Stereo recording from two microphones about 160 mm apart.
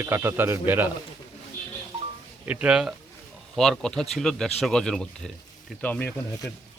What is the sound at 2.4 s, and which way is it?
Speech, 10° right (ahead or behind).